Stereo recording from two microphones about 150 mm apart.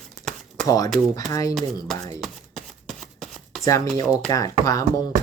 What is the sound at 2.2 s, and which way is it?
Shuffling cards, centre (ahead or behind).